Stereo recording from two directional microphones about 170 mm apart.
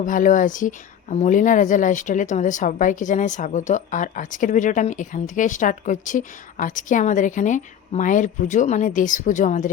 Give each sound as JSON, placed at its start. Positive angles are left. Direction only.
{"t": 0.0, "sound": "speech", "side_deg": 50}